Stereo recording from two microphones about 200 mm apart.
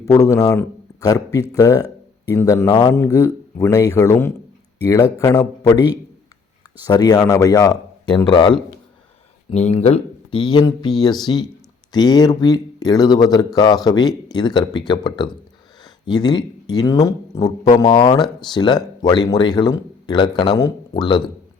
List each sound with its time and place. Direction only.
0.0 s speech: 15° left (ahead or behind)
6.8 s speech: 20° left (ahead or behind)
15.8 s a sound: 20° left (ahead or behind)
16.7 s speech: 15° left (ahead or behind)